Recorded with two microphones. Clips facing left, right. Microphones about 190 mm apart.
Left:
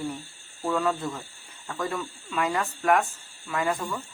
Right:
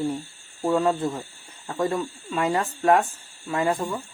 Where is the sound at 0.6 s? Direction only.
30° right (ahead or behind).